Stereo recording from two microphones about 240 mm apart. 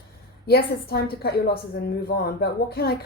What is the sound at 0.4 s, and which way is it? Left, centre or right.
A woman's voice, left.